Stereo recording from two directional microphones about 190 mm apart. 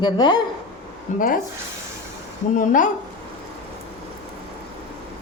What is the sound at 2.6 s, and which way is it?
Speech, 45° left (ahead or behind).